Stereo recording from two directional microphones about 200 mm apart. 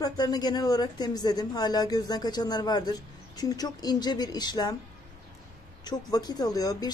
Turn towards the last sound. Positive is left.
turn(degrees=20)  # may be behind; listen again after turning